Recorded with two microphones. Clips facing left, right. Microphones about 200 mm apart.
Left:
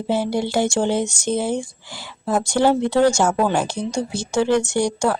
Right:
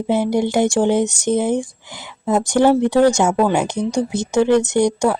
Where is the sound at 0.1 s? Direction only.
20° right (ahead or behind).